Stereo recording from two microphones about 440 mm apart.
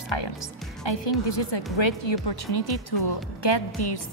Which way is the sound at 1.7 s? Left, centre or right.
Left.